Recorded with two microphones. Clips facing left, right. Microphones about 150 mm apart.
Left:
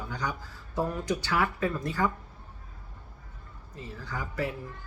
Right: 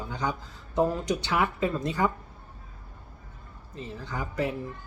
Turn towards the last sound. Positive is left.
turn(degrees=-20)  # may be behind; listen again after turning